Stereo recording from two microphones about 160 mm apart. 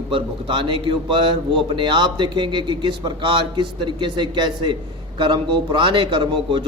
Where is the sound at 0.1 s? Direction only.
30° right (ahead or behind).